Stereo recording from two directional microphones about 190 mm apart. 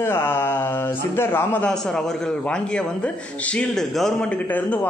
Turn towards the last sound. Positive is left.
turn(degrees=10)  # may be behind; listen again after turning